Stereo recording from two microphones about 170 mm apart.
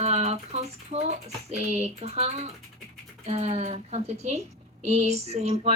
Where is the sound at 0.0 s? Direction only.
40° right (ahead or behind).